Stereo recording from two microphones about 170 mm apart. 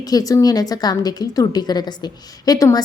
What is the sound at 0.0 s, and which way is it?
A woman's voice, 20° left (ahead or behind).